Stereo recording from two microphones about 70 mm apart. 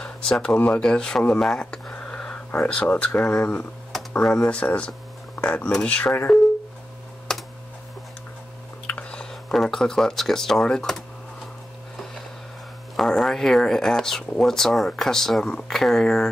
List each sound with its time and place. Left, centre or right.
0.0 s speech: centre
1.6 s a sound: centre
2.7 s speech: centre
7.3 s computer keyboard: centre
8.8 s speech: centre
12.9 s speech: centre